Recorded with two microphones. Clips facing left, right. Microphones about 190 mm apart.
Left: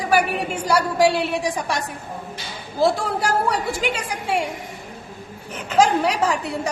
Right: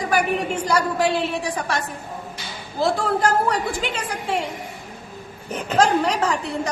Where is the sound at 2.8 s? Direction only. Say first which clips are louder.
Even; 10° left (ahead or behind).